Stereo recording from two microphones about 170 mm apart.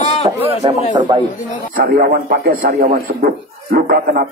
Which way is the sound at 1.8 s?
60° right (ahead or behind).